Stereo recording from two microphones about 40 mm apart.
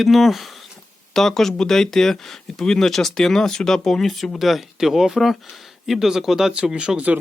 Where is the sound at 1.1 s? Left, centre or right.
Centre.